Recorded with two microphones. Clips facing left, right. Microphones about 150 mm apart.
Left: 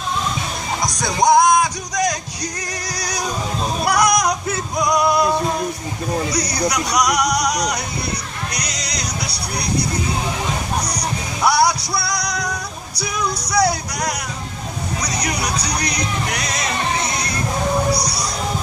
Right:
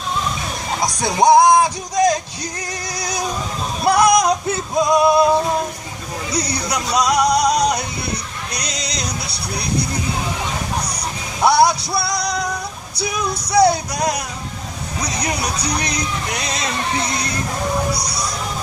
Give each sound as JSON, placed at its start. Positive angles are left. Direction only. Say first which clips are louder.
{"t": 0.8, "sound": "music", "louder": "right 3 dB", "side_deg": -30}
{"t": 3.8, "sound": "female singing", "louder": "right 4 dB", "side_deg": -25}
{"t": 6.3, "sound": "speech", "louder": "left 2 dB", "side_deg": -30}
{"t": 8.5, "sound": "music", "louder": "right 1 dB", "side_deg": -25}
{"t": 11.4, "sound": "music", "louder": "right 3 dB", "side_deg": -25}
{"t": 13.5, "sound": "music", "louder": "right 5 dB", "side_deg": -25}